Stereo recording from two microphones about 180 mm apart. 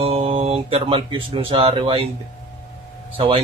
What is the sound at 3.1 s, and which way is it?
Speech, 30° right (ahead or behind).